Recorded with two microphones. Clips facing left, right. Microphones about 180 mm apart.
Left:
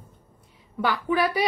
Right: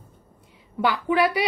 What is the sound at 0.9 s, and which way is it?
Speech, 20° right (ahead or behind).